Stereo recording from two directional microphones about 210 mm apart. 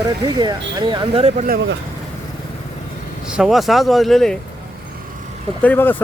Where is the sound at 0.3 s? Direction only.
20° right (ahead or behind).